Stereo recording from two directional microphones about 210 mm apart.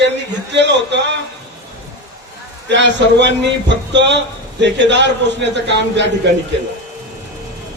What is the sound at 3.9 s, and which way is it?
A man's voice, 55° right (ahead or behind).